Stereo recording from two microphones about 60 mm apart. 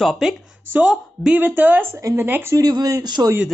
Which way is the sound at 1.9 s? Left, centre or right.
Right.